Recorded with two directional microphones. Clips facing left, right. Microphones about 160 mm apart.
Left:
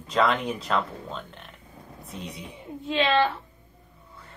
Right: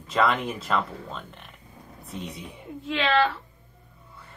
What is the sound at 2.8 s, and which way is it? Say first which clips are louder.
Speech: left 1 dB; 20° left (ahead or behind).